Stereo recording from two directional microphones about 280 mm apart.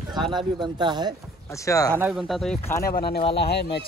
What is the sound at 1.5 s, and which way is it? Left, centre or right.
Speech, centre.